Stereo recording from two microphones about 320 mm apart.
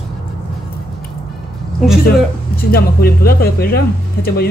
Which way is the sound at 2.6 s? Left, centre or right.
Left.